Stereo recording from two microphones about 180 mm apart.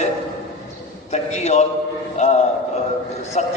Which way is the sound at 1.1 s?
40° left (ahead or behind).